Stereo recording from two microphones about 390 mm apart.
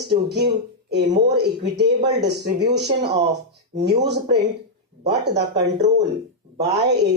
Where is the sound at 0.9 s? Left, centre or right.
Right.